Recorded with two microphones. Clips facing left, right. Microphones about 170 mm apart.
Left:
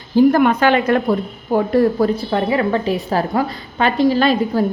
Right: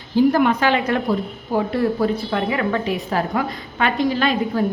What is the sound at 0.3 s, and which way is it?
Speech, 60° left (ahead or behind).